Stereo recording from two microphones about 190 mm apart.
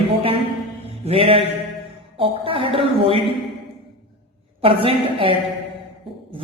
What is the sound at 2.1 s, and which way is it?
Speech, 30° right (ahead or behind).